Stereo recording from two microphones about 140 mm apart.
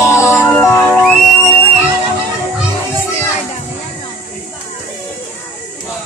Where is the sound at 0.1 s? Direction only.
20° left (ahead or behind).